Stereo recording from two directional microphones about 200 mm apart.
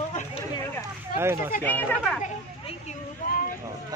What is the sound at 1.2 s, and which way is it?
Speech, 15° right (ahead or behind).